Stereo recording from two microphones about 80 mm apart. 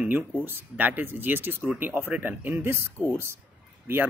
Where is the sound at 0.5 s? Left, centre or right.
Right.